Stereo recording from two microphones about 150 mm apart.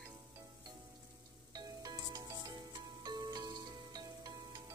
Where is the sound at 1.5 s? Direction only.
25° right (ahead or behind).